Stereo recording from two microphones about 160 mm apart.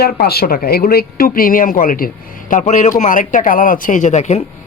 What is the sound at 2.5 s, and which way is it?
A man's voice, 50° left (ahead or behind).